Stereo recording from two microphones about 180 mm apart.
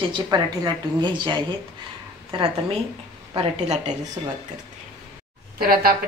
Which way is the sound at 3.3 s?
35° right (ahead or behind).